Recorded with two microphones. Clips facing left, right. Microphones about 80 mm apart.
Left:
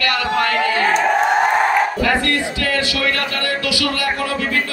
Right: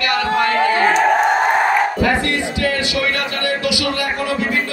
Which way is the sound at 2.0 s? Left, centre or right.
Right.